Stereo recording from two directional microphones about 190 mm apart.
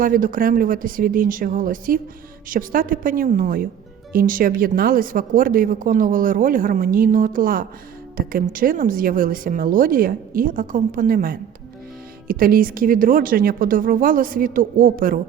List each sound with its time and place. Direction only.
0.0 s speech: 45° right (ahead or behind)